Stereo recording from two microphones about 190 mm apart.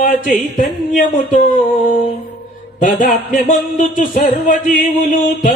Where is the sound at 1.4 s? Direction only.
40° left (ahead or behind).